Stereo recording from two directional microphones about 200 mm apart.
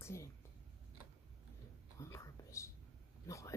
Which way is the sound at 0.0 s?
15° left (ahead or behind).